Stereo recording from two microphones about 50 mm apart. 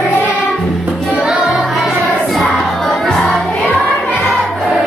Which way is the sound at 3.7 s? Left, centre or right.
Left.